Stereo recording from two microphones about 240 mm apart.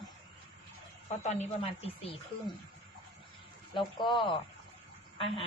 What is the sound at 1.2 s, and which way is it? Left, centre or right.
A woman's voice, left.